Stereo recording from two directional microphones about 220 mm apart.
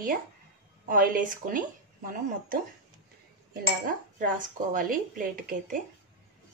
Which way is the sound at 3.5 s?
40° right (ahead or behind).